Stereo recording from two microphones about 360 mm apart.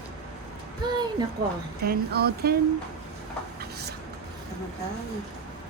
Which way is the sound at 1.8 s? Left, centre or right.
Right.